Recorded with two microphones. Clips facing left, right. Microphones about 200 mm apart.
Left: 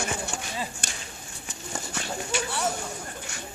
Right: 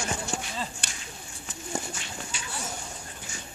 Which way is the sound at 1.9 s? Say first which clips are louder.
Left 8 dB; 75° left (ahead or behind).